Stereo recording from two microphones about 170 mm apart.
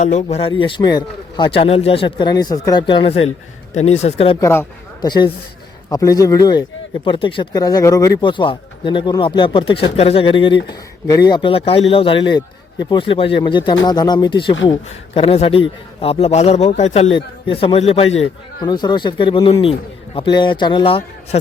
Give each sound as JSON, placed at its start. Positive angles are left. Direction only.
{"t": 0.0, "sound": "a man's voice", "side_deg": 45}
{"t": 4.4, "sound": "a man's voice", "side_deg": 15}
{"t": 18.6, "sound": "speech", "side_deg": 25}